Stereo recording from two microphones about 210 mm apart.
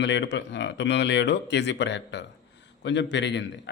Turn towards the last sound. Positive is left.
turn(degrees=55)  # may be behind; listen again after turning